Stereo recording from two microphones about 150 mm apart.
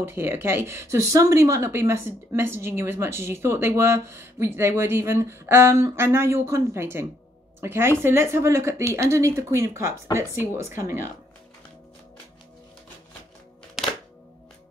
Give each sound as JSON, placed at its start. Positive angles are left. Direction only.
{"t": 0.0, "sound": "speech", "side_deg": -15}